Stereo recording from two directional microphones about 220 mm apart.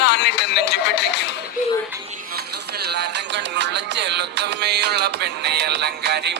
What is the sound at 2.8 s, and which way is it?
Music, 50° right (ahead or behind).